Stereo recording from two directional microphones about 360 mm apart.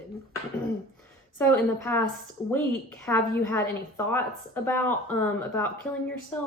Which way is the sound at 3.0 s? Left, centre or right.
Centre.